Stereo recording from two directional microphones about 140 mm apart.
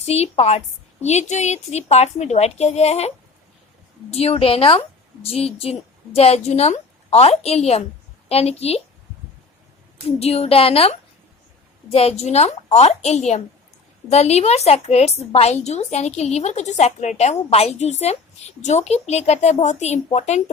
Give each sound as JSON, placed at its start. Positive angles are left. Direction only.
{"t": 0.0, "sound": "a woman's voice", "side_deg": 50}
{"t": 4.1, "sound": "a woman's voice", "side_deg": 45}
{"t": 10.2, "sound": "a woman's voice", "side_deg": 45}